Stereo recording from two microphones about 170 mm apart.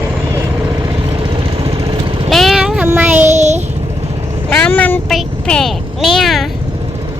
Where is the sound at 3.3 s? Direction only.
45° right (ahead or behind).